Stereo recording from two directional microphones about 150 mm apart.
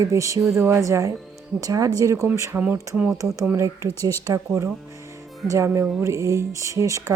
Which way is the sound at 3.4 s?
20° right (ahead or behind).